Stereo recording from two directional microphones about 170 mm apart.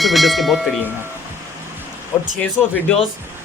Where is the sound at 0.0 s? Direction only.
Centre (ahead or behind).